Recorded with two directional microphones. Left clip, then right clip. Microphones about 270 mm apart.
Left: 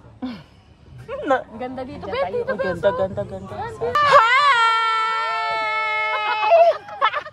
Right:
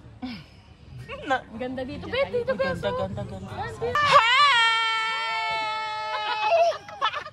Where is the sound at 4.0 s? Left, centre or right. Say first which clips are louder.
Left 4 dB; left.